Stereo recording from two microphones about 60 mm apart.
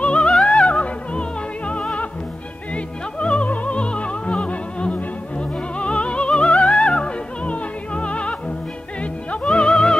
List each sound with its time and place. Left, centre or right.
0.0 s music: centre